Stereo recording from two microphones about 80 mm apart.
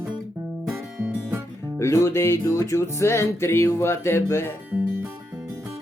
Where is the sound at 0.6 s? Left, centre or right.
Centre.